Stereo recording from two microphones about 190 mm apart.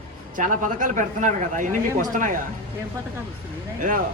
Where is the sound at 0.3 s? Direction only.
45° right (ahead or behind).